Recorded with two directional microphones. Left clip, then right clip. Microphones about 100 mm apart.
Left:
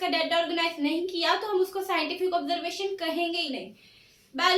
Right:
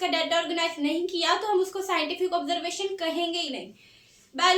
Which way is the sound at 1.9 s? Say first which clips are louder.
Right 2 dB; 35° right (ahead or behind).